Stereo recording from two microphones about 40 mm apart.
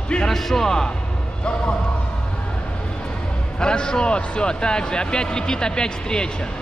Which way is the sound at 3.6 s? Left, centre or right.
Left.